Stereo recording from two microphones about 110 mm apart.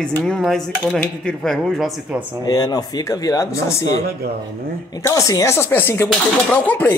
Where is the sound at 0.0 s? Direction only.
10° left (ahead or behind).